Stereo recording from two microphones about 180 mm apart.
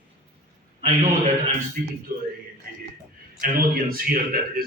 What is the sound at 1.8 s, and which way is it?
Speech, 50° right (ahead or behind).